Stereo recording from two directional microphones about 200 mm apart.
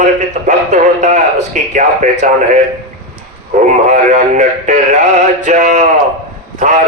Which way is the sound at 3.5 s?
35° right (ahead or behind).